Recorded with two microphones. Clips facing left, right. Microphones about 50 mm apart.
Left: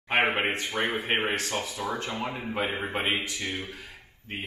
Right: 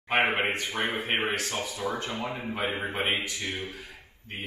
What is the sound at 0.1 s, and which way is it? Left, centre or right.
Speech, centre.